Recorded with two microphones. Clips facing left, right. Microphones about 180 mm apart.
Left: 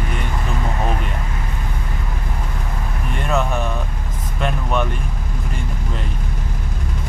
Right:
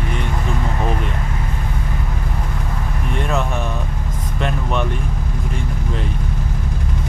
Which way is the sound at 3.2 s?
Centre (ahead or behind).